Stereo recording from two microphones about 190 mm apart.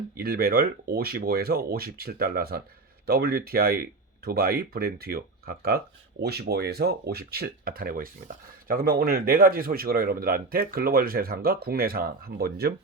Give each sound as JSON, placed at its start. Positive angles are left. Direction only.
{"t": 0.2, "sound": "speech", "side_deg": -55}